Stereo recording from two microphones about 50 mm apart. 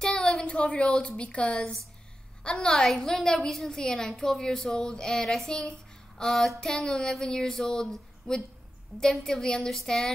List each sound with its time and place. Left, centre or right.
0.0 s speech: centre
2.4 s speech: centre